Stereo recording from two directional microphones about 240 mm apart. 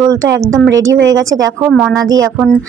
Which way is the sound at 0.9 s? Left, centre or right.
Right.